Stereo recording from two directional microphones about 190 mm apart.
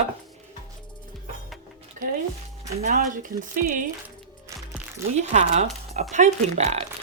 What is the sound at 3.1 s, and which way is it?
Speech, 45° right (ahead or behind).